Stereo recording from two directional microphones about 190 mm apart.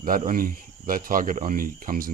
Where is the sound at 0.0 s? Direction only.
45° right (ahead or behind).